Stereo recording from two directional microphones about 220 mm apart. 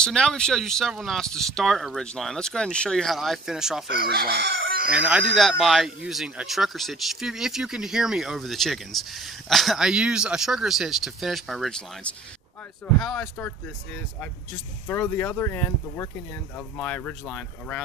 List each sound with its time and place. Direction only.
0.0 s speech: 5° left (ahead or behind)
3.8 s chicken: 45° right (ahead or behind)
4.9 s speech: 5° right (ahead or behind)
14.9 s speech: 10° left (ahead or behind)